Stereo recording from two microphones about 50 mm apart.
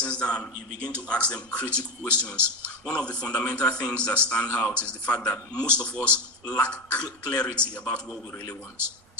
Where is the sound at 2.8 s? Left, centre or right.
Left.